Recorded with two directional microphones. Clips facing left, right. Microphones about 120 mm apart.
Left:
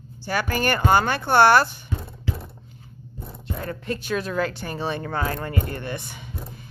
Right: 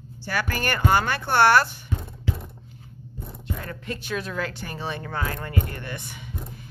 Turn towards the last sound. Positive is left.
turn(degrees=30)  # may be behind; listen again after turning